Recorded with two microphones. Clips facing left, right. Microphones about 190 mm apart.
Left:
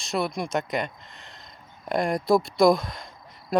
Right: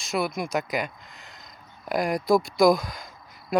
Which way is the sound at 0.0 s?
Centre (ahead or behind).